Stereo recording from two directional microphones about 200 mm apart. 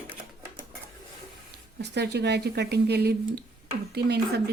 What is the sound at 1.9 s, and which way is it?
Speech, 55° right (ahead or behind).